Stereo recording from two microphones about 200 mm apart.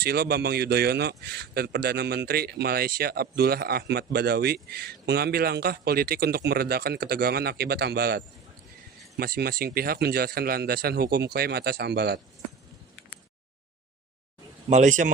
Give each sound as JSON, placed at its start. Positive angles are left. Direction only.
{"t": 0.0, "sound": "a man's voice", "side_deg": -50}
{"t": 14.7, "sound": "a man's voice", "side_deg": -40}